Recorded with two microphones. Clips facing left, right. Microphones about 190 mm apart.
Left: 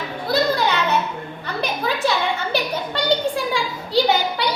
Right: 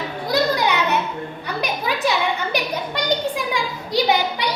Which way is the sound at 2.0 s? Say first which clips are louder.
Right 1 dB; 15° right (ahead or behind).